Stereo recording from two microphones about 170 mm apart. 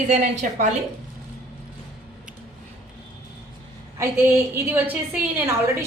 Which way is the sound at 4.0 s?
15° right (ahead or behind).